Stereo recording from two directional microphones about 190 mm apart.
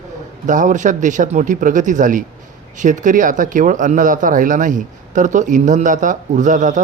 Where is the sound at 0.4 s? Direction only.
40° right (ahead or behind).